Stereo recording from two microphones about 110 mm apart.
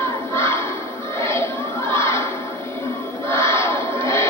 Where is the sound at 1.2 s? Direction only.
25° left (ahead or behind).